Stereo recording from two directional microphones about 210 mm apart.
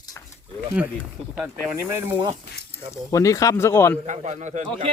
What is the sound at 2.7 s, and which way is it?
Speech, 15° left (ahead or behind).